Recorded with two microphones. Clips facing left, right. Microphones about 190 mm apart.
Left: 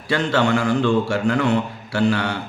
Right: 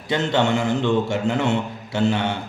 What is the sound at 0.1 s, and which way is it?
A man's voice, 20° right (ahead or behind).